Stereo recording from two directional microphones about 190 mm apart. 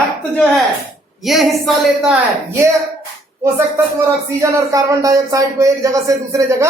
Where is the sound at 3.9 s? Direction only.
15° right (ahead or behind).